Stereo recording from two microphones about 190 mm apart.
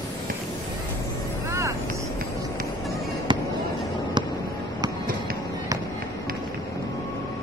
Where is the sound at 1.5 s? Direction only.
15° right (ahead or behind).